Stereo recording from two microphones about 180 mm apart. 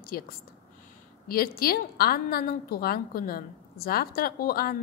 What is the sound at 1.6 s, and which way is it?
A woman's voice, 55° left (ahead or behind).